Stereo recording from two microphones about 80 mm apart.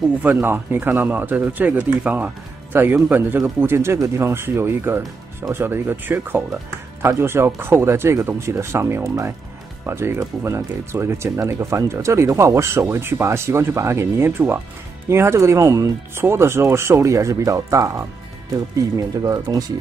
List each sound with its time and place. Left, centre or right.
0.2 s speech: right